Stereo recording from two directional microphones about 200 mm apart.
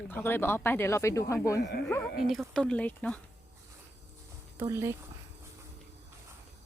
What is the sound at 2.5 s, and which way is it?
Speech, 5° left (ahead or behind).